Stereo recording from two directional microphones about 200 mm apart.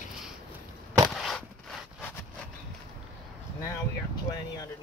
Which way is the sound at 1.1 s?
Centre (ahead or behind).